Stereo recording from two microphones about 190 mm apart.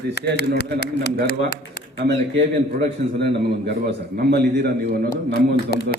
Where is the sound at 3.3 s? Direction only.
60° right (ahead or behind).